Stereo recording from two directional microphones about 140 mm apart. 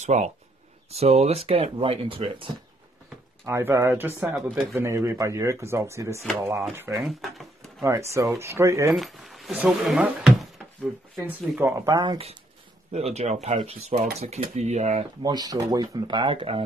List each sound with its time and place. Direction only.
0.0 s speech: 55° right (ahead or behind)
3.4 s speech: 20° right (ahead or behind)
7.0 s speech: centre (ahead or behind)
7.8 s speech: 20° right (ahead or behind)
8.9 s speech: centre (ahead or behind)
11.8 s speech: 30° right (ahead or behind)
12.9 s speech: 50° right (ahead or behind)
15.2 s speech: 30° right (ahead or behind)